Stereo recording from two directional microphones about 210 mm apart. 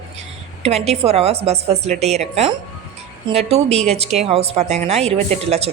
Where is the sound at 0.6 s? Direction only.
30° right (ahead or behind).